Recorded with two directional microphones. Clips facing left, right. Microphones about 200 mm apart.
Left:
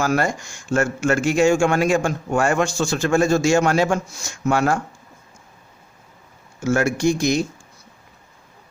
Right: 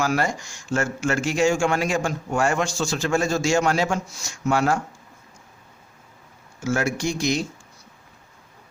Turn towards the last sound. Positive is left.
turn(degrees=50)  # may be behind; listen again after turning